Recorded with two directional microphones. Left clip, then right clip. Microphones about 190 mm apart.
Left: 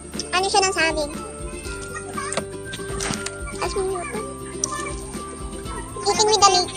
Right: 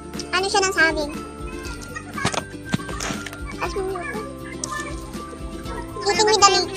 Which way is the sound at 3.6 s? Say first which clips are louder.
Left 1 dB; centre (ahead or behind).